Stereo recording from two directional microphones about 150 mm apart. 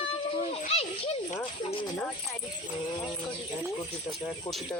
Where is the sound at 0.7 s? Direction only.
40° left (ahead or behind).